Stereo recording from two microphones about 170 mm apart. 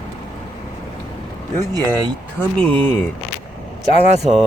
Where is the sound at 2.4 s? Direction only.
10° left (ahead or behind).